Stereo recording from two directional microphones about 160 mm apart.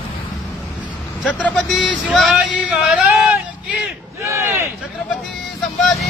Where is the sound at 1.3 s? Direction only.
5° left (ahead or behind); by 4.7 s 15° right (ahead or behind).